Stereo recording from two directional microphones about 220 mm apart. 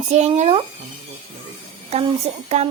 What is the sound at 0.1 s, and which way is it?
Speech, 30° right (ahead or behind).